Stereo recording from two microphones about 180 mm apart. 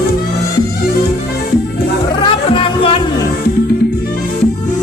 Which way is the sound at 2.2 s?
30° left (ahead or behind).